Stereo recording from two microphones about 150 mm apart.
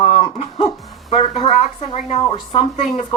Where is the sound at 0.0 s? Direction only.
40° left (ahead or behind).